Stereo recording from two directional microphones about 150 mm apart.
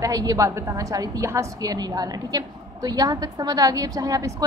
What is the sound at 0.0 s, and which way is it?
A woman's voice, 25° right (ahead or behind).